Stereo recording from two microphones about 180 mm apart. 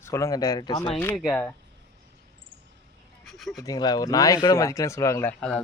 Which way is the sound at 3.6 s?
20° left (ahead or behind).